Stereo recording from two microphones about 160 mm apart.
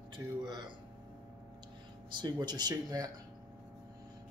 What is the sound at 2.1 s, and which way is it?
Speech, 25° right (ahead or behind).